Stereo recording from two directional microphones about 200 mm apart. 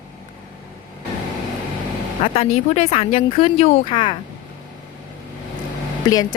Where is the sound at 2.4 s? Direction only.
30° left (ahead or behind).